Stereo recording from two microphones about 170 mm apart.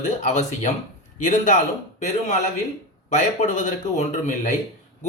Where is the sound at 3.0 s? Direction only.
45° left (ahead or behind).